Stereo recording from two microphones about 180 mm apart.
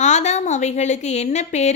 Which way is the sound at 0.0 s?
40° left (ahead or behind).